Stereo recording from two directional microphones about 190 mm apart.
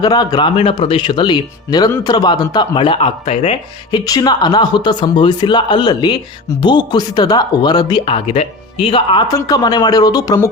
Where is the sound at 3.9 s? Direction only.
20° left (ahead or behind).